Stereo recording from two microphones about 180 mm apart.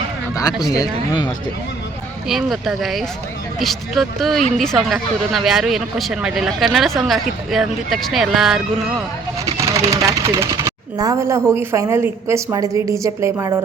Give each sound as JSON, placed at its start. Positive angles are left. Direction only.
{"t": 0.7, "sound": "speech", "side_deg": 20}
{"t": 2.3, "sound": "speech", "side_deg": 0}
{"t": 9.7, "sound": "speech", "side_deg": -15}